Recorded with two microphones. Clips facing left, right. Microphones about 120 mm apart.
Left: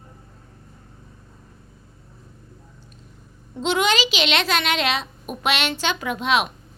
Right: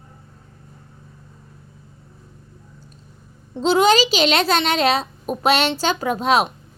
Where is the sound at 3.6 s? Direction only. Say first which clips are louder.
Right 6 dB; 35° right (ahead or behind).